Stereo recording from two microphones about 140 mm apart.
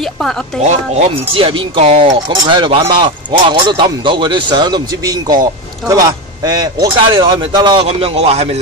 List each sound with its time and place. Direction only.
0.0 s speech: 5° left (ahead or behind)
1.3 s speech: 40° right (ahead or behind)
7.9 s a man's voice: 45° right (ahead or behind)